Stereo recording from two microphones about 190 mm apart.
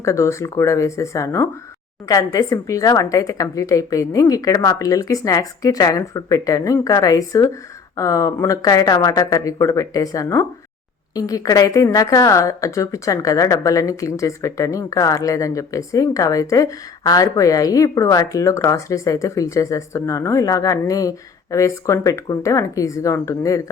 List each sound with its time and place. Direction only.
0.0 s a woman's voice: 15° left (ahead or behind)